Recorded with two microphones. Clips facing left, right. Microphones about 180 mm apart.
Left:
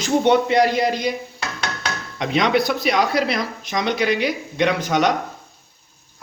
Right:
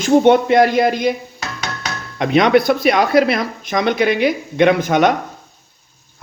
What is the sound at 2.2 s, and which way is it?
Speech, 55° right (ahead or behind).